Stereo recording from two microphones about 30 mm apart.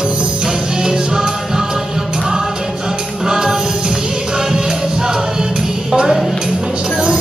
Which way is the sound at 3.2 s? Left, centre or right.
Centre.